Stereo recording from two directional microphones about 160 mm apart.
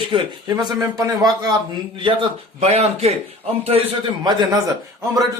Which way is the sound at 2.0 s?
35° right (ahead or behind).